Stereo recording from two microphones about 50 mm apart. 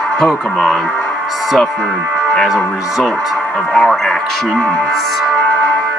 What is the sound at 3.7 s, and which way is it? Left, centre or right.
Speech, centre.